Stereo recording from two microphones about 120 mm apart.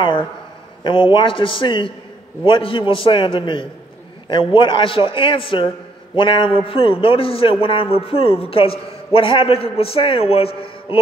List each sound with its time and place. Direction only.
0.8 s a man's voice: 45° left (ahead or behind)